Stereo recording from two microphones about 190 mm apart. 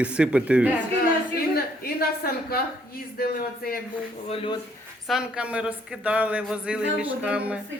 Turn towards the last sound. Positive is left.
turn(degrees=-5)  # may be behind; listen again after turning